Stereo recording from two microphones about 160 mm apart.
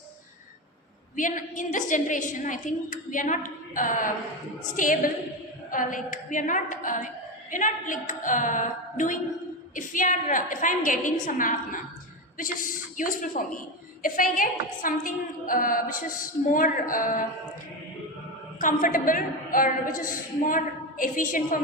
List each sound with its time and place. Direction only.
1.1 s a woman's voice: 55° left (ahead or behind)
13.0 s a woman's voice: 55° left (ahead or behind)
18.6 s a woman's voice: 55° left (ahead or behind)